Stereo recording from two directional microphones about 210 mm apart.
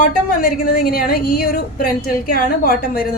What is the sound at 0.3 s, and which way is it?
A woman's voice, 40° left (ahead or behind).